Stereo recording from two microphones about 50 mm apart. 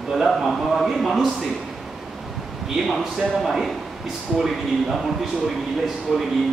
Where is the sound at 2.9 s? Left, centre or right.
Centre.